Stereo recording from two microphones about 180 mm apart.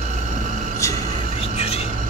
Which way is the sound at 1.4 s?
35° left (ahead or behind).